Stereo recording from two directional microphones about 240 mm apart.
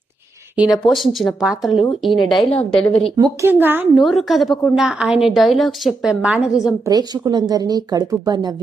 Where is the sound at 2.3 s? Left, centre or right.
Centre.